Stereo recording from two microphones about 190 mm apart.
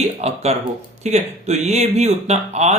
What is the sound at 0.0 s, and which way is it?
Speech, 35° right (ahead or behind).